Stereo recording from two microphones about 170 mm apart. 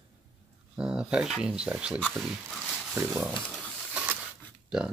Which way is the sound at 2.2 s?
5° right (ahead or behind).